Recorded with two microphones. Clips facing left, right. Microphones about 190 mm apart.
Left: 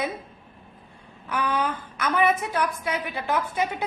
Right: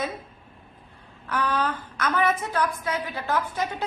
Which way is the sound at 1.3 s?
10° left (ahead or behind).